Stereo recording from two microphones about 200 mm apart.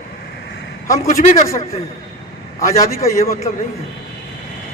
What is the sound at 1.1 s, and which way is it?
Speech, 35° left (ahead or behind).